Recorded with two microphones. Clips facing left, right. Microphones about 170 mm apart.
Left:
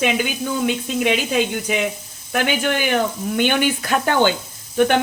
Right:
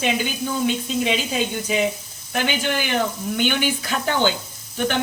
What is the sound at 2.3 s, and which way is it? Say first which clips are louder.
Speech: left 3 dB; 55° left (ahead or behind).